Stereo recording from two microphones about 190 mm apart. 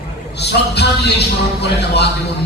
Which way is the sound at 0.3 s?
60° left (ahead or behind).